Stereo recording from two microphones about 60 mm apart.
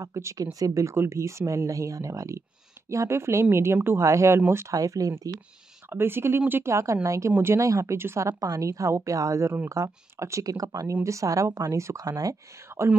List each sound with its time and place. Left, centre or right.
0.0 s speech: right
0.9 s speech: right
4.5 s speech: right
4.7 s speech: right
5.9 s speech: right
6.6 s speech: right
10.4 s speech: right
11.1 s speech: right
12.7 s whispering: right